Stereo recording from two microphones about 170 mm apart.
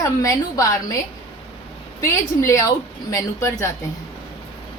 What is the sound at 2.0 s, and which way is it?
Speech, 15° left (ahead or behind).